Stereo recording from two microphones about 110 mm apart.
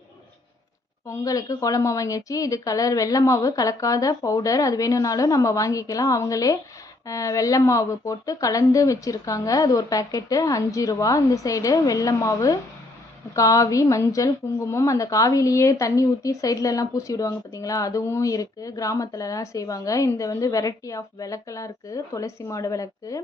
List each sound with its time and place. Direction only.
1.0 s a woman's voice: 30° left (ahead or behind)